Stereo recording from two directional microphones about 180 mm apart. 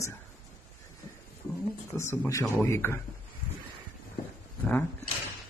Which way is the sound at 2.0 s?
15° left (ahead or behind).